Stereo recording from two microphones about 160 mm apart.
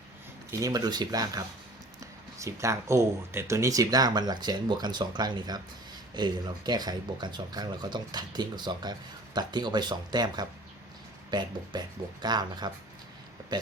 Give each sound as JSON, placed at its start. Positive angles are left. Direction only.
{"t": 0.6, "sound": "speech", "side_deg": -25}